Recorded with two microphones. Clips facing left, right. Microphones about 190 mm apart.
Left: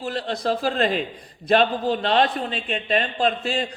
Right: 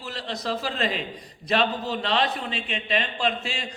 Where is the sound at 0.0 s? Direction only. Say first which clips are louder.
Left 6 dB; 50° left (ahead or behind).